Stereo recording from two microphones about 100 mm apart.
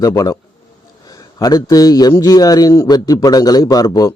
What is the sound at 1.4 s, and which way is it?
A man's voice, 40° left (ahead or behind).